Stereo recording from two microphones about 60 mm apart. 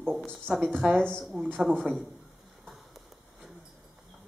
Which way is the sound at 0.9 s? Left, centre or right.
Centre.